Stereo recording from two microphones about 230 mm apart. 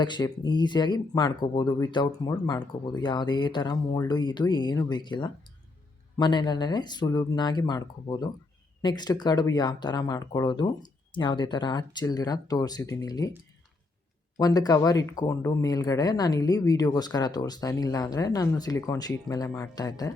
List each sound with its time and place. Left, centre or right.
0.0 s speech: centre
14.3 s speech: centre